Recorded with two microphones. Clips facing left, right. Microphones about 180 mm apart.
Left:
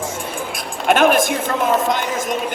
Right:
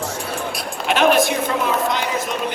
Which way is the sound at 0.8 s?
50° left (ahead or behind).